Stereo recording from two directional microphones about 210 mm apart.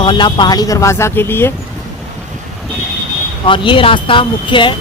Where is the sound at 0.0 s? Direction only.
20° left (ahead or behind).